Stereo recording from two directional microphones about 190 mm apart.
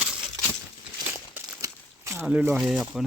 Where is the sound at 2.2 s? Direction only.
10° right (ahead or behind).